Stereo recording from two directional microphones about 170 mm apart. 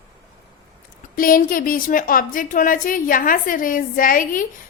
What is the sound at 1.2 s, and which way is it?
A woman's voice, 55° left (ahead or behind).